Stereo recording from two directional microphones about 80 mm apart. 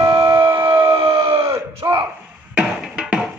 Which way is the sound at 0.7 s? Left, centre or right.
Right.